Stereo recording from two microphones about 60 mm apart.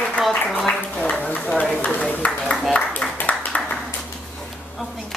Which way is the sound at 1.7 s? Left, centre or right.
Left.